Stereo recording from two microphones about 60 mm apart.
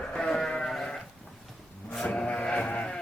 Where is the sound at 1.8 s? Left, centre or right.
Centre.